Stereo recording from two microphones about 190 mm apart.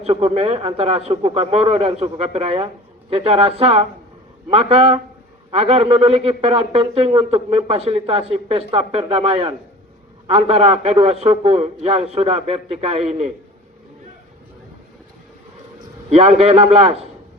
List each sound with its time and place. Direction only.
0.0 s a man's voice: 30° right (ahead or behind)
16.0 s a man's voice: 35° right (ahead or behind)